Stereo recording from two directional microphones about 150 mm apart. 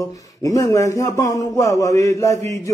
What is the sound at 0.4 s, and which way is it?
A man's voice, 20° left (ahead or behind).